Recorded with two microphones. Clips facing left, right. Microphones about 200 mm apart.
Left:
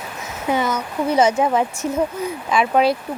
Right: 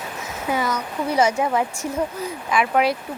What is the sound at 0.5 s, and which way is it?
Speech, 25° left (ahead or behind).